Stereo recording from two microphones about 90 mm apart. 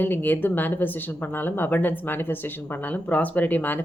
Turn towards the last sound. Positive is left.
turn(degrees=20)  # may be behind; listen again after turning